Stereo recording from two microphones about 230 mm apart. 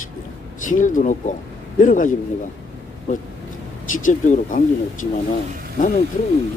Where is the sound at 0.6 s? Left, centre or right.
Left.